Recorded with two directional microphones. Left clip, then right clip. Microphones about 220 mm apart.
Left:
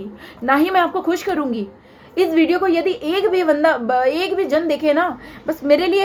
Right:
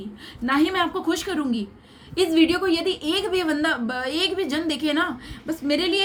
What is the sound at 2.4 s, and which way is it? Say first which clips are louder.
Speech: left 4 dB; 25° right (ahead or behind).